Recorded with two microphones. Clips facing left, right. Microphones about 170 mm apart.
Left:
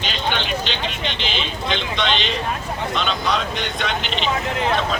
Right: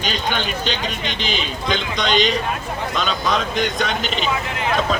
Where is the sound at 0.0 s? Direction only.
40° right (ahead or behind).